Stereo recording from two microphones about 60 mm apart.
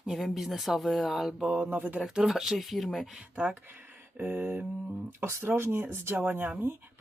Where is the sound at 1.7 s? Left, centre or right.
Right.